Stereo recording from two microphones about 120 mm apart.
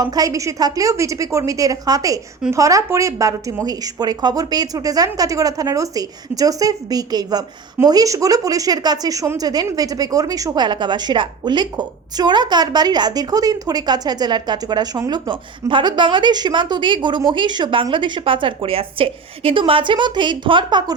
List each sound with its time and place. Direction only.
0.0 s a woman's voice: 30° right (ahead or behind)